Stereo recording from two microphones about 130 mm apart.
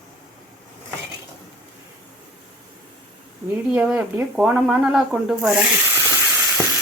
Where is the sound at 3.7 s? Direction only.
10° right (ahead or behind).